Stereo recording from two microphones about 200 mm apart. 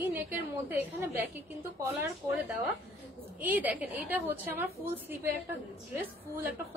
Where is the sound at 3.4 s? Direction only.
10° right (ahead or behind).